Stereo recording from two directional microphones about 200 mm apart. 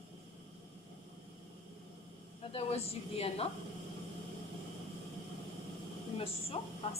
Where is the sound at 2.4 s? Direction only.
30° left (ahead or behind).